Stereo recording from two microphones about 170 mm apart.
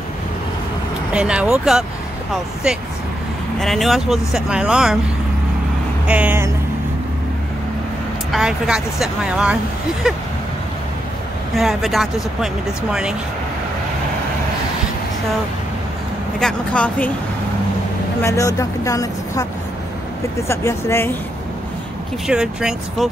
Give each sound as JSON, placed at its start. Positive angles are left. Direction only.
{"t": 1.1, "sound": "speech", "side_deg": -5}
{"t": 3.5, "sound": "speech", "side_deg": 0}
{"t": 6.0, "sound": "speech", "side_deg": -10}
{"t": 8.3, "sound": "speech", "side_deg": -5}
{"t": 11.5, "sound": "speech", "side_deg": 0}
{"t": 16.3, "sound": "speech", "side_deg": 5}
{"t": 18.2, "sound": "speech", "side_deg": 15}
{"t": 20.4, "sound": "speech", "side_deg": 15}
{"t": 22.3, "sound": "speech", "side_deg": -5}